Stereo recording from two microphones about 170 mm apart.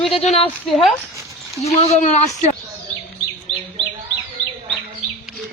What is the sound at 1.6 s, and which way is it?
Speech, 40° left (ahead or behind).